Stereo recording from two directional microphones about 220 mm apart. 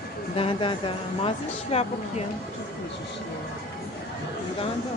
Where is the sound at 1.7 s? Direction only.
30° left (ahead or behind).